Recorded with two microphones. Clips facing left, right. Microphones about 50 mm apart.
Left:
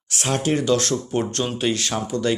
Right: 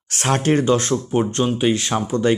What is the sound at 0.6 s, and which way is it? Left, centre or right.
Speech, right.